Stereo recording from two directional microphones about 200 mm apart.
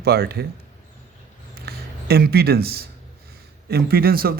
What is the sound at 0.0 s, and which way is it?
Speech, 50° right (ahead or behind).